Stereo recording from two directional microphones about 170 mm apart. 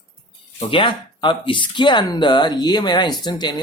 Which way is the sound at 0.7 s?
30° left (ahead or behind).